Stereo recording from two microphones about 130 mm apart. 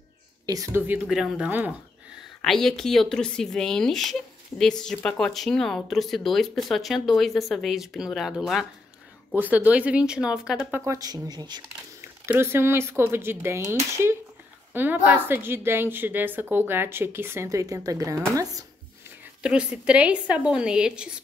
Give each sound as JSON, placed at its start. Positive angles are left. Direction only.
{"t": 0.5, "sound": "speech", "side_deg": -25}
{"t": 0.8, "sound": "a woman's voice", "side_deg": -10}
{"t": 2.4, "sound": "speech", "side_deg": 5}
{"t": 9.3, "sound": "a woman's voice", "side_deg": -15}
{"t": 10.8, "sound": "speech", "side_deg": -25}
{"t": 12.0, "sound": "a woman's voice", "side_deg": -20}
{"t": 18.3, "sound": "a sound", "side_deg": -25}
{"t": 19.4, "sound": "a woman's voice", "side_deg": -5}